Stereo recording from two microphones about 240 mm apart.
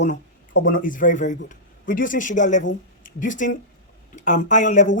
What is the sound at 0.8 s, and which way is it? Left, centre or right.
Speech, left.